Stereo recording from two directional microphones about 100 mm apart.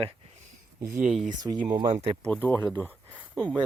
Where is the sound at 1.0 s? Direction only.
5° right (ahead or behind).